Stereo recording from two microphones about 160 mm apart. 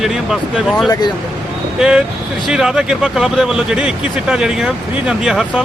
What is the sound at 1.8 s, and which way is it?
Speech, 5° right (ahead or behind).